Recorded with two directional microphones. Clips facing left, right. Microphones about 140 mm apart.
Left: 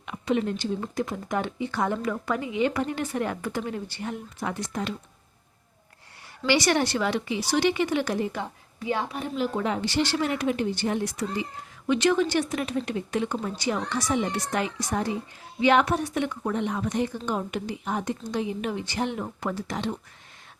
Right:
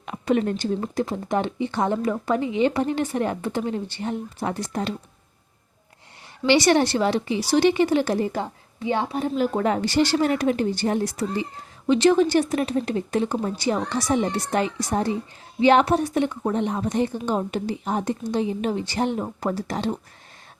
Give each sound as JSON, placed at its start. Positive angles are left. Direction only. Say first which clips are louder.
{"t": 0.0, "sound": "speech", "louder": "right 4 dB", "side_deg": -45}
{"t": 0.9, "sound": "speech", "louder": "right 4 dB", "side_deg": -30}
{"t": 6.4, "sound": "a woman's voice", "louder": "right 5 dB", "side_deg": -25}
{"t": 9.3, "sound": "a woman's voice", "louder": "right 4 dB", "side_deg": -45}